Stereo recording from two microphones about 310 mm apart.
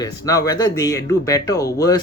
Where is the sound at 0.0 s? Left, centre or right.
Centre.